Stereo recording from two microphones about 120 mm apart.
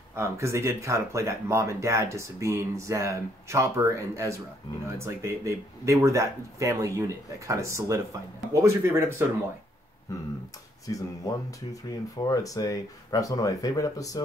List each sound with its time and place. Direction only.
0.1 s speech: 25° right (ahead or behind)
10.9 s speech: 30° left (ahead or behind)